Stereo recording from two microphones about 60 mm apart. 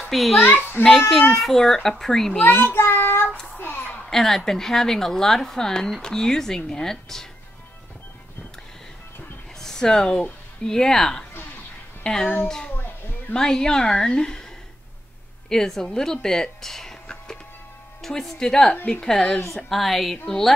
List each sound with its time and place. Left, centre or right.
0.1 s a child's voice: centre
0.4 s a child's voice: left
1.3 s speech: centre
2.4 s child singing: left
3.5 s a sound: left
4.1 s speech: centre
9.6 s a sound: centre
10.7 s speech: centre
13.3 s speech: centre
15.5 s speech: centre